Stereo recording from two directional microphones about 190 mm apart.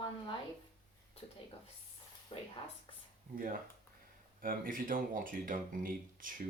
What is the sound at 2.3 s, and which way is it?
Speech, 25° left (ahead or behind).